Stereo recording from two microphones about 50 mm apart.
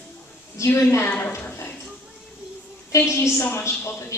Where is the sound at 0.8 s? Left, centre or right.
Left.